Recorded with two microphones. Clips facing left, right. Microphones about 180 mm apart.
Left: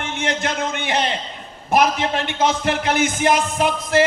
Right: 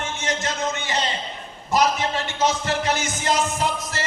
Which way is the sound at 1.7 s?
60° left (ahead or behind).